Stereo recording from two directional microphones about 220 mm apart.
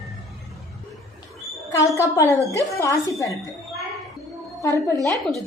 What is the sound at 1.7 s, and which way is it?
Speech, 15° left (ahead or behind).